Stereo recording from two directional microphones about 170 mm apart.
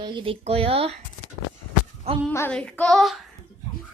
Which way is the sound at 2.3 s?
10° left (ahead or behind).